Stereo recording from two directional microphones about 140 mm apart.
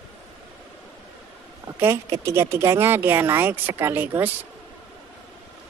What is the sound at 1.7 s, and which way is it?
Speech, 20° right (ahead or behind).